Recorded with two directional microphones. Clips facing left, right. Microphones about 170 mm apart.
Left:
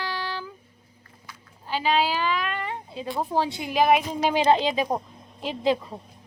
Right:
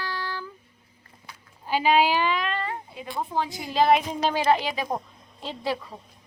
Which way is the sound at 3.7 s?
15° left (ahead or behind).